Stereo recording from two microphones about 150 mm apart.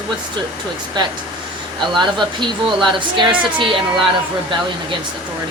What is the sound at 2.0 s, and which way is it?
Speech, 30° right (ahead or behind).